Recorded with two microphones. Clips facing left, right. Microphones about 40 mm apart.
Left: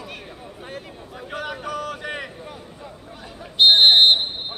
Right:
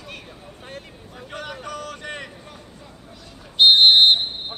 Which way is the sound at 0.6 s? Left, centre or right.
Centre.